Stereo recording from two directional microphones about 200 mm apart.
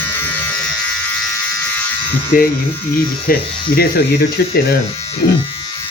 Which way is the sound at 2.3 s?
45° left (ahead or behind).